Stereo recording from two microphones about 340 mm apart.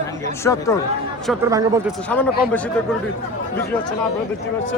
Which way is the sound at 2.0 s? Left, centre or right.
Centre.